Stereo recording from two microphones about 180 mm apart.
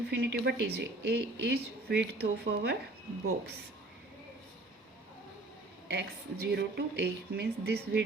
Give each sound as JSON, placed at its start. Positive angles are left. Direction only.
{"t": 0.1, "sound": "speech", "side_deg": -70}
{"t": 5.9, "sound": "speech", "side_deg": -65}